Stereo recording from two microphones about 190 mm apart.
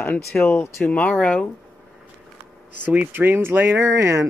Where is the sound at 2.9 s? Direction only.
10° right (ahead or behind).